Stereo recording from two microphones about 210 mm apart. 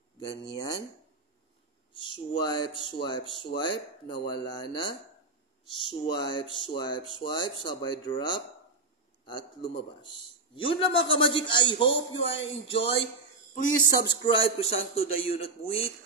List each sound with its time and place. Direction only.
0.2 s speech: 20° left (ahead or behind)
2.0 s speech: 20° left (ahead or behind)
6.2 s speech: 25° left (ahead or behind)
13.6 s speech: 45° left (ahead or behind)
14.0 s speech: 25° left (ahead or behind)